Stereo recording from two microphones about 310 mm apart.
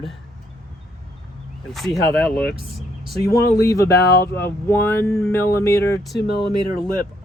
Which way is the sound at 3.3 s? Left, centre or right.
Centre.